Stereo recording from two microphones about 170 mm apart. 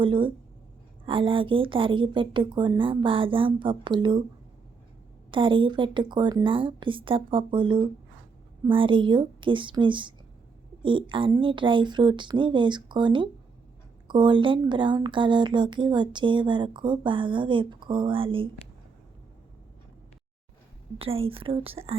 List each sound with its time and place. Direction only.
0.0 s speech: 30° right (ahead or behind)
5.3 s speech: 30° right (ahead or behind)
21.0 s a woman's voice: 35° right (ahead or behind)